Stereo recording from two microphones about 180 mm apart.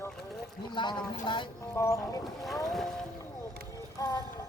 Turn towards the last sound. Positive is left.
turn(degrees=20)  # may be behind; listen again after turning